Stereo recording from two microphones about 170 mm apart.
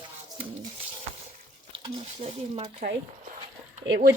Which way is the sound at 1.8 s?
35° right (ahead or behind).